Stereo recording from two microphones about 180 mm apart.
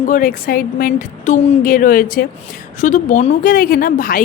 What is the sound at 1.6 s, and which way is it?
A woman's voice, 50° left (ahead or behind).